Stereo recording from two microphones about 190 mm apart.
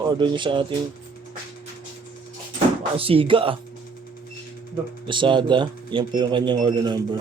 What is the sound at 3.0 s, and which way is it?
Speech, 30° right (ahead or behind).